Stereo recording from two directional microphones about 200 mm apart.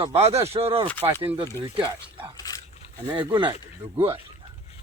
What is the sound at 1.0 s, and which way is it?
Speech, 10° right (ahead or behind).